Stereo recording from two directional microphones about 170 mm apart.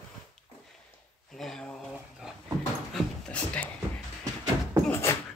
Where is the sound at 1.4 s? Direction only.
5° left (ahead or behind).